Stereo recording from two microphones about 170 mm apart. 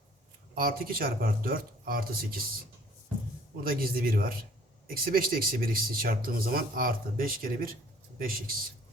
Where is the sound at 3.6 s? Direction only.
60° right (ahead or behind).